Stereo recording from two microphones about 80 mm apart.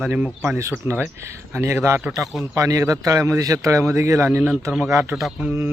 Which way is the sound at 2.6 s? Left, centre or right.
Right.